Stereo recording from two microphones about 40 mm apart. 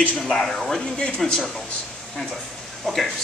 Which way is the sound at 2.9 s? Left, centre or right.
Centre.